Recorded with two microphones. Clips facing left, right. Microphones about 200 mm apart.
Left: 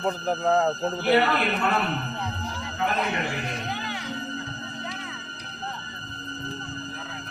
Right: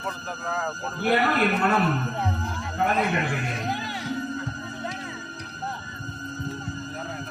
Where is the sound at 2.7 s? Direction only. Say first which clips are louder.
Right 3 dB; 50° right (ahead or behind).